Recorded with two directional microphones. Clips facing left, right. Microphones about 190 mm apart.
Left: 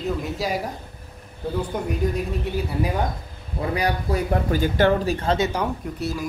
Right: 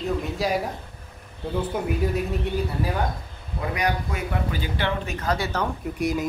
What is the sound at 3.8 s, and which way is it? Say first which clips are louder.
Speech: left 3 dB; 30° left (ahead or behind).